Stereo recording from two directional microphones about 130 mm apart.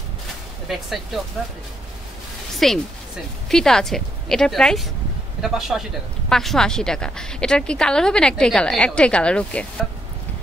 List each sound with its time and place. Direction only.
0.7 s speech: centre (ahead or behind)
2.5 s speech: centre (ahead or behind)